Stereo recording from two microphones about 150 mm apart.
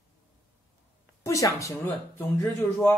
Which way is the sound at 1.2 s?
20° left (ahead or behind).